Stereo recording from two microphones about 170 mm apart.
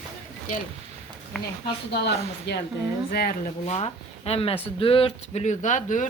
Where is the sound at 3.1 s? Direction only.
65° left (ahead or behind).